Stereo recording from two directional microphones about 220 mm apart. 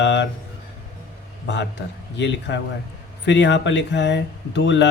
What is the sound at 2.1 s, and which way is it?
Speech, 55° left (ahead or behind).